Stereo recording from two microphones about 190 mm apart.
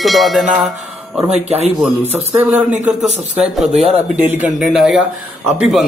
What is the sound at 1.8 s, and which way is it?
A man's voice, 10° right (ahead or behind).